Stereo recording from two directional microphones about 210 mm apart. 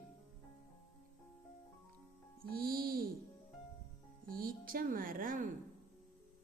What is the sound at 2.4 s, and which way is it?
Music, 45° right (ahead or behind).